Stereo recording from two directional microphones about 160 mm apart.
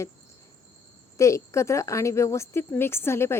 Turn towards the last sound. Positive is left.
turn(degrees=15)  # may be behind; listen again after turning